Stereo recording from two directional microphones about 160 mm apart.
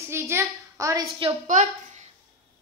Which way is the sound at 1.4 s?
50° right (ahead or behind).